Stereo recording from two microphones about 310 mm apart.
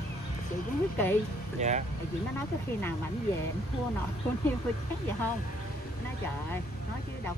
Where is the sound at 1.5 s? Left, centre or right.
Right.